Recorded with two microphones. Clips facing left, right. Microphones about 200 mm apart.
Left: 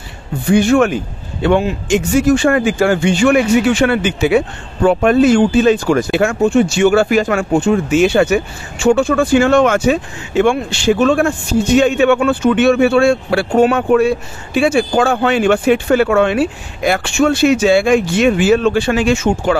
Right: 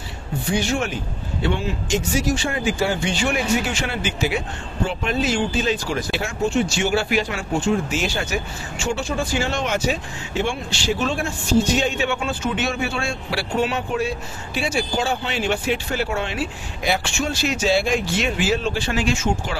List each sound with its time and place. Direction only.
0.5 s speech: 55° left (ahead or behind)